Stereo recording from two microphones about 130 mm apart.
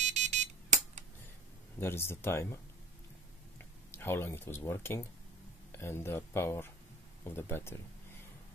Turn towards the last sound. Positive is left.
turn(degrees=20)  # may be behind; listen again after turning